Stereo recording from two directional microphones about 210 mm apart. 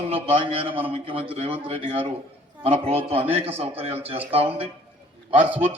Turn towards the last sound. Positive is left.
turn(degrees=-5)  # may be behind; listen again after turning